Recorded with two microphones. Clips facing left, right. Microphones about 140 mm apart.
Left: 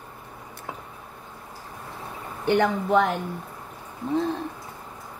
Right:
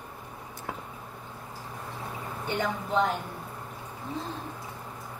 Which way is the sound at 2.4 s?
70° left (ahead or behind).